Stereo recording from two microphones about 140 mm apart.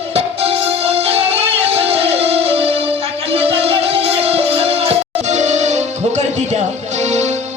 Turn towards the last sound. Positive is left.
turn(degrees=-55)  # may be behind; listen again after turning